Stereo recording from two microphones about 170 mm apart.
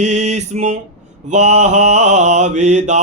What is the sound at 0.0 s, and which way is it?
Mantra, 40° right (ahead or behind).